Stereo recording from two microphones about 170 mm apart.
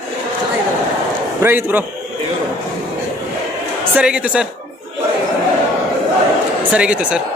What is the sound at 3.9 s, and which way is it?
Speech, 5° right (ahead or behind).